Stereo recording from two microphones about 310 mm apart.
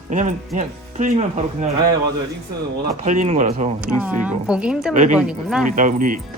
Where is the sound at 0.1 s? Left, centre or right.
Right.